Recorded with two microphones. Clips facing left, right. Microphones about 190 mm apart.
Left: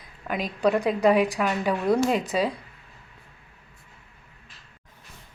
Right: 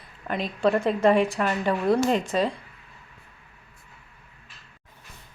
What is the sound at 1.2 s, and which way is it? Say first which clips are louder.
Speech: even; 15° left (ahead or behind).